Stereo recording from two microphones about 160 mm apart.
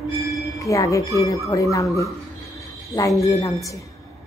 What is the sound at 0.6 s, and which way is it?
Speech, 20° left (ahead or behind).